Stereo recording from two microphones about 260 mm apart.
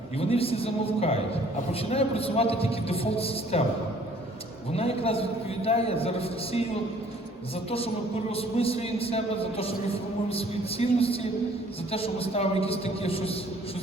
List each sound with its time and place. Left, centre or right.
0.2 s a man's voice: left
4.7 s a man's voice: left
8.3 s a man's voice: left